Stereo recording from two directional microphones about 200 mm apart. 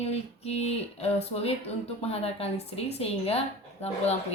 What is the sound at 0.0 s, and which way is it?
Speech, 30° left (ahead or behind).